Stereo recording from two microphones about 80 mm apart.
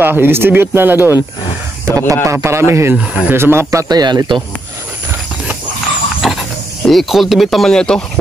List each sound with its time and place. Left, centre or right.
0.0 s speech: right
1.9 s a man's voice: right
3.0 s speech: centre
3.3 s a man's voice: right
3.9 s speech: right
6.2 s pig: centre
6.9 s speech: centre